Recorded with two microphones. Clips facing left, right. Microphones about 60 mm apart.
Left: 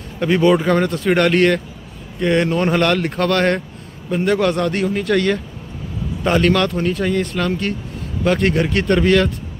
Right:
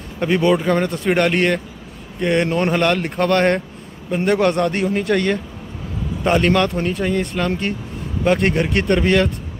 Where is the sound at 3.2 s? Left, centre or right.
Centre.